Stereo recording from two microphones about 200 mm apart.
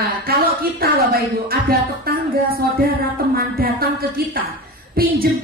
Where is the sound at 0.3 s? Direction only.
50° right (ahead or behind).